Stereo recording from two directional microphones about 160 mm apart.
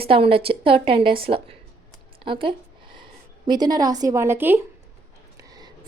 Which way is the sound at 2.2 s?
30° right (ahead or behind).